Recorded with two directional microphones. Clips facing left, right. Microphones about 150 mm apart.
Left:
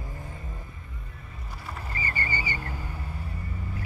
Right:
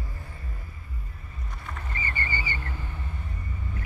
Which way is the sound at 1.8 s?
35° left (ahead or behind).